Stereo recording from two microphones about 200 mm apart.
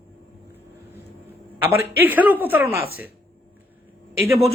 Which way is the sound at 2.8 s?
50° left (ahead or behind).